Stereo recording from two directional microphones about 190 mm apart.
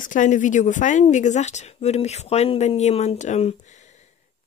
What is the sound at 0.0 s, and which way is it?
Speech, 45° left (ahead or behind).